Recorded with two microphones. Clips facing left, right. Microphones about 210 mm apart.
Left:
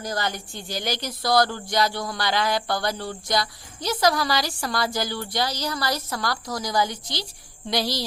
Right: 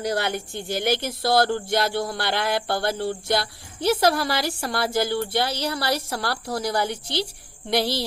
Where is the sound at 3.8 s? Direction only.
55° right (ahead or behind).